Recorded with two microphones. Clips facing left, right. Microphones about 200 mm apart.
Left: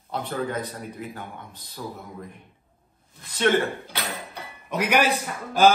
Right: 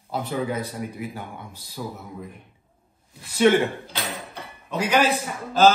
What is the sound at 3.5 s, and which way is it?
Speech, 10° right (ahead or behind).